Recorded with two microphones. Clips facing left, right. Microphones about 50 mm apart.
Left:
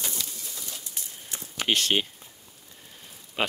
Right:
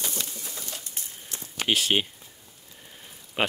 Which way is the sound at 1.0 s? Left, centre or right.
Right.